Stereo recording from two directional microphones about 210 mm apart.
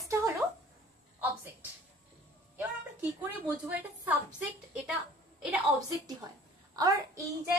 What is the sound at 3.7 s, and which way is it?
A woman's voice, 5° right (ahead or behind).